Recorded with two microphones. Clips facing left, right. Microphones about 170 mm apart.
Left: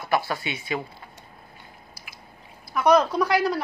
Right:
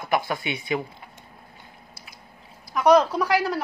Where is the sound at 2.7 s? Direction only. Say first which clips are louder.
Right 2 dB; 10° right (ahead or behind).